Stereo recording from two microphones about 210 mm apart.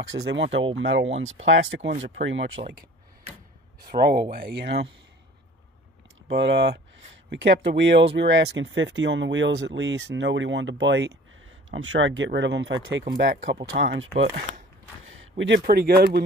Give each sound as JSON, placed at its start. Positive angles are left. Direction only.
{"t": 0.3, "sound": "speech", "side_deg": -60}
{"t": 1.9, "sound": "speech", "side_deg": -35}
{"t": 2.2, "sound": "speech", "side_deg": -65}
{"t": 3.8, "sound": "speech", "side_deg": -45}
{"t": 6.3, "sound": "speech", "side_deg": -55}
{"t": 13.0, "sound": "speech", "side_deg": -45}
{"t": 15.3, "sound": "speech", "side_deg": -60}
{"t": 15.6, "sound": "speech", "side_deg": -45}